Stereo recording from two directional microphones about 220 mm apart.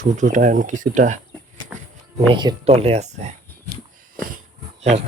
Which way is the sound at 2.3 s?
20° right (ahead or behind).